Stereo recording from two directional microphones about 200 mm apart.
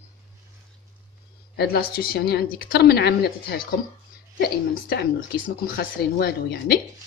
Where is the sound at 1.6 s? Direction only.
50° left (ahead or behind).